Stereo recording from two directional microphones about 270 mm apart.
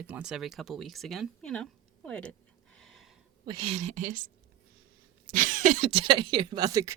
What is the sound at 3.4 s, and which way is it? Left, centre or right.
Speech, centre.